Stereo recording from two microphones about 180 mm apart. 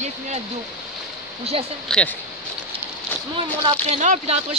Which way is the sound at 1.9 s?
5° left (ahead or behind).